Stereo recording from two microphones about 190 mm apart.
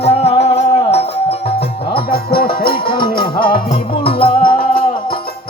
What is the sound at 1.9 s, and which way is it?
Music, 55° left (ahead or behind).